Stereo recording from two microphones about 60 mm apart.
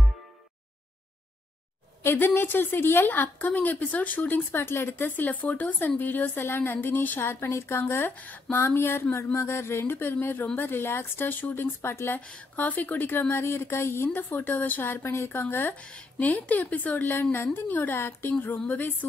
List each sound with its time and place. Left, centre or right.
2.0 s a woman's voice: left
8.2 s a woman's voice: left
10.7 s a woman's voice: left
12.2 s a woman's voice: centre; by 15.7 s left
15.7 s a woman's voice: centre
17.9 s speech: left
18.7 s a woman's voice: left